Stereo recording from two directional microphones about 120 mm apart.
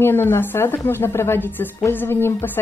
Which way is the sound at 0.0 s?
20° left (ahead or behind).